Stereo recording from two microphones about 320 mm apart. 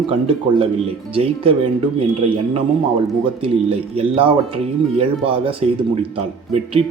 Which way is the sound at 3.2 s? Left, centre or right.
Centre.